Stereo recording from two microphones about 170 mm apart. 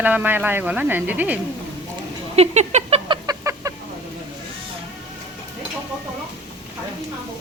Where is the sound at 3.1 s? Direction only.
20° right (ahead or behind).